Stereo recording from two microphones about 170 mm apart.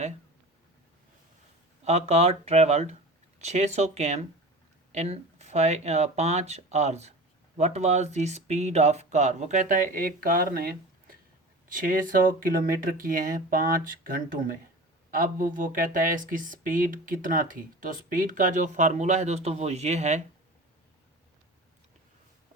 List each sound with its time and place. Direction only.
1.8 s speech: 40° right (ahead or behind)